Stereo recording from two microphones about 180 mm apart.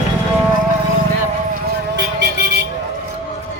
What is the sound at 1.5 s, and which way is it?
Vehicle, 70° right (ahead or behind).